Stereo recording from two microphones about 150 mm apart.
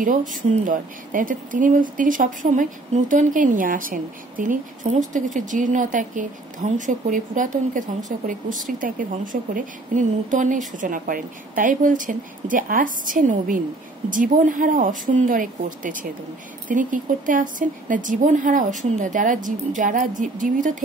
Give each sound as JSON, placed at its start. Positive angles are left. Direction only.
{"t": 0.0, "sound": "speech", "side_deg": -65}